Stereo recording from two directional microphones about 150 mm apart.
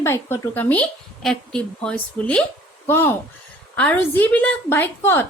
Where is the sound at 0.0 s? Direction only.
15° left (ahead or behind).